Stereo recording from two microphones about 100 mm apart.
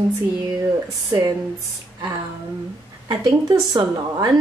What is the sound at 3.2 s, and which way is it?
A woman's voice, 45° right (ahead or behind).